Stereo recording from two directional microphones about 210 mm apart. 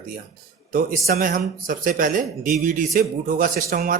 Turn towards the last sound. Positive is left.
turn(degrees=-45)  # may be behind; listen again after turning